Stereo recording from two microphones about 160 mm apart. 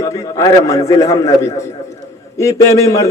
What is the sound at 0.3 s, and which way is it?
A man's voice, 20° left (ahead or behind).